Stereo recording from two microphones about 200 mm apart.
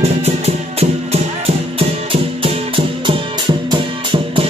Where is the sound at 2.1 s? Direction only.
25° right (ahead or behind).